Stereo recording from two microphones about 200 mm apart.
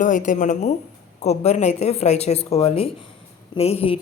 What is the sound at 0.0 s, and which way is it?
Speech, 40° left (ahead or behind).